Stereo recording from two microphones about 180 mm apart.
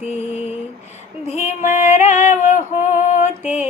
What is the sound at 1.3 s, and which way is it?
Female singing, 40° left (ahead or behind).